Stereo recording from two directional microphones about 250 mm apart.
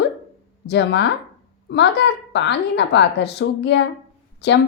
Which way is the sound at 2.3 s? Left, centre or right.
Left.